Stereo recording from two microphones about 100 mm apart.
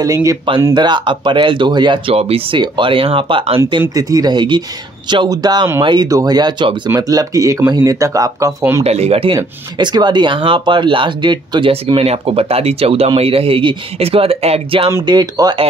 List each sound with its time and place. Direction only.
0.0 s speech: 35° right (ahead or behind)
0.7 s speech: 50° right (ahead or behind)
2.1 s speech: 75° right (ahead or behind)
3.9 s speech: 40° right (ahead or behind)
7.0 s speech: 40° right (ahead or behind)
8.8 s speech: 90° right
9.8 s speech: 45° right (ahead or behind)
11.7 s speech: 80° right
15.0 s speech: 40° right (ahead or behind)